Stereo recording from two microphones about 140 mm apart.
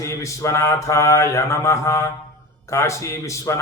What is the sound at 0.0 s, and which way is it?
Speech, 20° left (ahead or behind).